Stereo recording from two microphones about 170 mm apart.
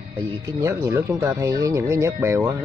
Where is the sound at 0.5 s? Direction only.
20° right (ahead or behind).